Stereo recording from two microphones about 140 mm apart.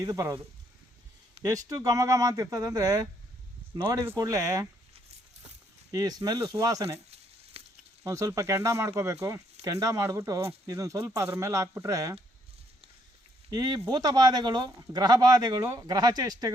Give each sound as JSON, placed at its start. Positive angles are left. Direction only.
{"t": 0.0, "sound": "speech", "side_deg": -25}
{"t": 1.5, "sound": "speech", "side_deg": -25}
{"t": 5.9, "sound": "speech", "side_deg": -25}
{"t": 7.6, "sound": "sizzle", "side_deg": -45}
{"t": 8.0, "sound": "speech", "side_deg": -20}
{"t": 13.5, "sound": "speech", "side_deg": -25}